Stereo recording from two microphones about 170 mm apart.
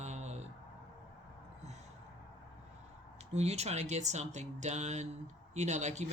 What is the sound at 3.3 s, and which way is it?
Speech, 40° right (ahead or behind).